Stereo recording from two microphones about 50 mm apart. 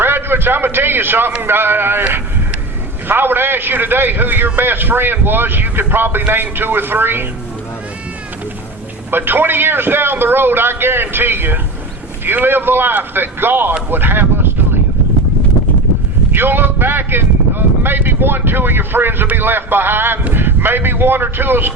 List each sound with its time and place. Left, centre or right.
0.0 s a man's voice: right
3.1 s a man's voice: right
9.0 s a man's voice: right
16.3 s a man's voice: right